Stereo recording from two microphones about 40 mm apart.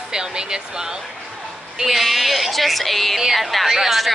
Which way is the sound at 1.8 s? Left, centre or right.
Centre.